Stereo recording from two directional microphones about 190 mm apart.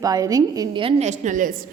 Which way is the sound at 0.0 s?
20° right (ahead or behind).